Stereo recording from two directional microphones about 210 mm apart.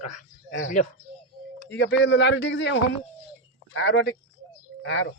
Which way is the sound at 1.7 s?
55° left (ahead or behind).